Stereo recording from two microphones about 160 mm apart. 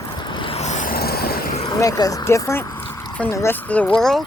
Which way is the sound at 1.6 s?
20° left (ahead or behind).